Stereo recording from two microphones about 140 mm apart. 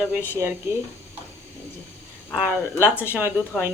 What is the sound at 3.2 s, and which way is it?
Speech, 15° right (ahead or behind).